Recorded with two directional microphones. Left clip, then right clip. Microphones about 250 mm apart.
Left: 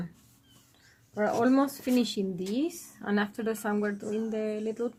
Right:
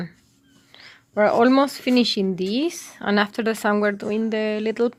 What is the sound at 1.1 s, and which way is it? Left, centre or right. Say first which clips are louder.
Speech: right 9 dB; right.